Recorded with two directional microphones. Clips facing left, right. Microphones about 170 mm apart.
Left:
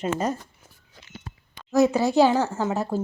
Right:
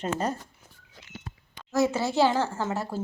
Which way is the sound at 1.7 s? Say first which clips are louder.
Left 5 dB; 15° left (ahead or behind).